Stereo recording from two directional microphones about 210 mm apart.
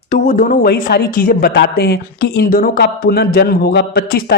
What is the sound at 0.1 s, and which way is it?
Speech, 40° left (ahead or behind).